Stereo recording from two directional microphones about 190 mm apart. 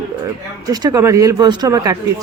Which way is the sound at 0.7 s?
20° right (ahead or behind).